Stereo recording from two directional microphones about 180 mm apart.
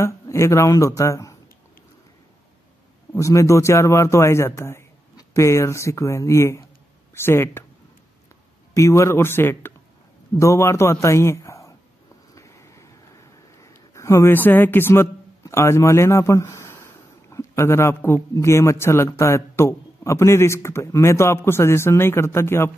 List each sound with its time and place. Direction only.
0.0 s speech: 15° left (ahead or behind)
3.2 s a man's voice: 15° left (ahead or behind)
8.7 s a man's voice: 15° left (ahead or behind)
12.4 s a sound: 15° left (ahead or behind)
17.3 s a man's voice: 15° left (ahead or behind)